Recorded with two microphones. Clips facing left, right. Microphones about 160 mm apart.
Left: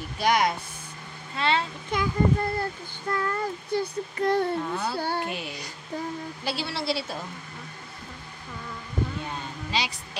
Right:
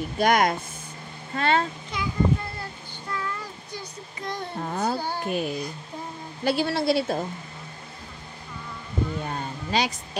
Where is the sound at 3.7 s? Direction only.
60° left (ahead or behind).